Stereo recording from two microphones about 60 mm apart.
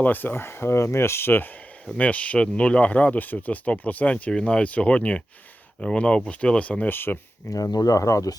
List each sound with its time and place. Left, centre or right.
0.0 s speech: left
2.0 s speech: left
4.3 s speech: centre
6.9 s speech: left
7.5 s speech: left